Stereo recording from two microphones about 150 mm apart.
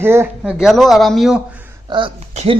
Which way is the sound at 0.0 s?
15° right (ahead or behind).